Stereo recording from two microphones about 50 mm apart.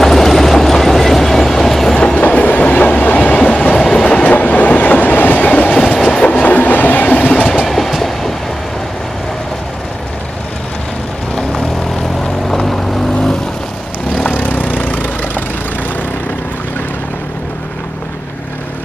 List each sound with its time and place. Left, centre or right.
0.0 s train: centre
2.0 s train: centre
2.2 s train: left; by 4.0 s centre
4.2 s train: left
5.7 s train: centre
6.2 s train: left
7.4 s train: centre
12.2 s vehicle: centre
14.3 s a sound: left